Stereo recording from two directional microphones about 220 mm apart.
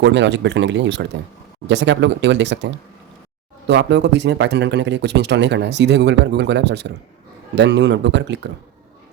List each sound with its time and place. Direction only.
0.0 s speech: 55° right (ahead or behind)